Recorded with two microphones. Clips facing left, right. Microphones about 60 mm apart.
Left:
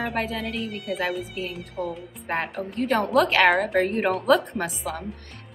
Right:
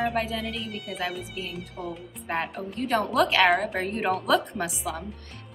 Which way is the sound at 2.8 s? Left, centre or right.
Left.